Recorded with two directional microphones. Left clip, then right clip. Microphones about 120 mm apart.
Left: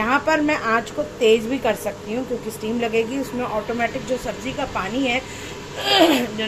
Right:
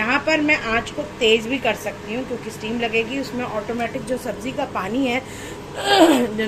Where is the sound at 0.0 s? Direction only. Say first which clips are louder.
Even; 20° left (ahead or behind).